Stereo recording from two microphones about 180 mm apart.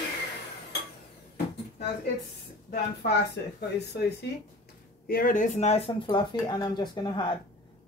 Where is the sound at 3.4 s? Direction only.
70° left (ahead or behind).